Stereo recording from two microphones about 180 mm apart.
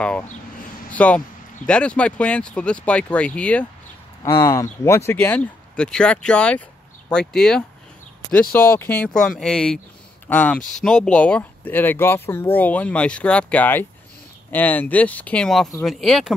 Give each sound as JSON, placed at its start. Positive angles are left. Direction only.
{"t": 0.9, "sound": "speech", "side_deg": 5}
{"t": 4.2, "sound": "speech", "side_deg": 15}